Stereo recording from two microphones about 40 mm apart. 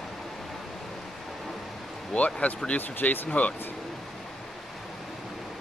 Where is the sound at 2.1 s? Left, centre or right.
Left.